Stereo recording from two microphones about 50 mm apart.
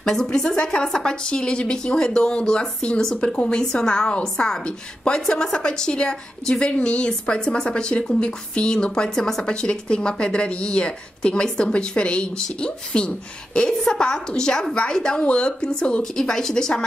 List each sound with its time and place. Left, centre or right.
0.0 s a woman's voice: centre